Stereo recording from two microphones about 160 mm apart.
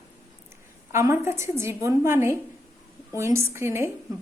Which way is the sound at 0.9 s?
15° right (ahead or behind).